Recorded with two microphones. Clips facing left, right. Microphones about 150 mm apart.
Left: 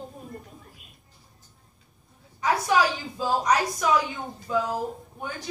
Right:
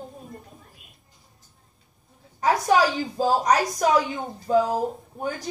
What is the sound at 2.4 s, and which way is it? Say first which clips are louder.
A woman's voice: right 3 dB; 40° right (ahead or behind).